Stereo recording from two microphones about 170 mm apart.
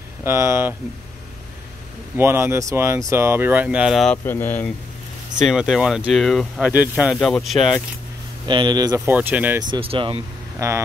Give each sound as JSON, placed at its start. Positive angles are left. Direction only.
{"t": 0.2, "sound": "speech", "side_deg": -15}
{"t": 2.1, "sound": "speech", "side_deg": -15}
{"t": 4.2, "sound": "speech", "side_deg": 10}
{"t": 5.4, "sound": "speech", "side_deg": -5}
{"t": 8.5, "sound": "speech", "side_deg": -25}
{"t": 9.0, "sound": "speech", "side_deg": -10}
{"t": 9.6, "sound": "speech", "side_deg": -30}
{"t": 10.6, "sound": "speech", "side_deg": -20}